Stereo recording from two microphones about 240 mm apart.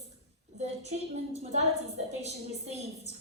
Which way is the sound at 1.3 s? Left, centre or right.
Right.